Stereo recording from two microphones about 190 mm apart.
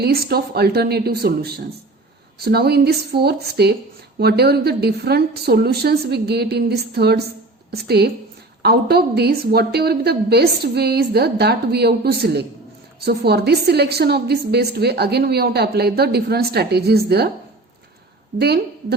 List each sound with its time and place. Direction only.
0.0 s a woman's voice: 55° right (ahead or behind)
18.3 s a woman's voice: 60° right (ahead or behind)